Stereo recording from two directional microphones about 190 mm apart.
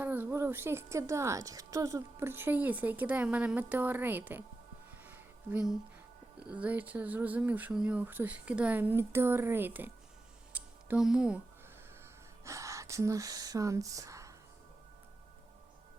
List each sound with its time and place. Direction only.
0.0 s a woman's voice: 10° right (ahead or behind)
5.0 s music: 10° right (ahead or behind)
6.4 s a woman's voice: 5° right (ahead or behind)
10.5 s music: 5° right (ahead or behind)
12.5 s speech: 15° right (ahead or behind)